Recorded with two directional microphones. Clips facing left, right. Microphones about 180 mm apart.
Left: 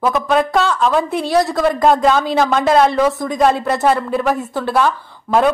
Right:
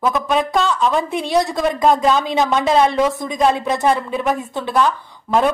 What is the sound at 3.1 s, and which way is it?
Speech, 20° right (ahead or behind).